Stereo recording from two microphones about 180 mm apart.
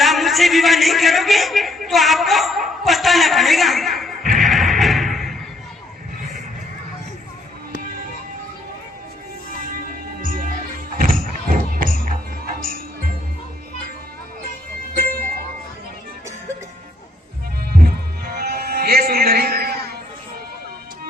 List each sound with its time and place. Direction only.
0.0 s a sound: centre (ahead or behind)
4.4 s music: centre (ahead or behind)
7.8 s music: 50° right (ahead or behind)
9.6 s music: 50° right (ahead or behind)
17.7 s music: 60° right (ahead or behind)